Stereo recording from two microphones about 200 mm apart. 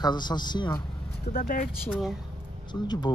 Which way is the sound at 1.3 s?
45° left (ahead or behind).